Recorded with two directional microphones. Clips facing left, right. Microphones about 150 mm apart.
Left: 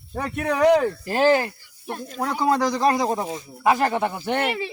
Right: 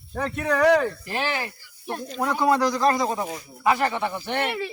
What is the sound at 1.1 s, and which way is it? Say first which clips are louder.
Speech: left 9 dB; 40° left (ahead or behind).